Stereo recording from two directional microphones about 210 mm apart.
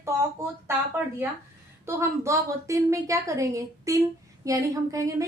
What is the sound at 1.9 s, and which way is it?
A woman's voice, 15° right (ahead or behind).